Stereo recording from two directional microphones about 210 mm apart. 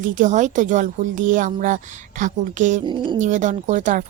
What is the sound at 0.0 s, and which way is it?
A woman's voice, 40° right (ahead or behind).